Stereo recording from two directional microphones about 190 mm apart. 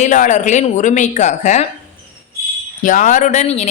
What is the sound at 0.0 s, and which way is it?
A woman's voice, 40° left (ahead or behind).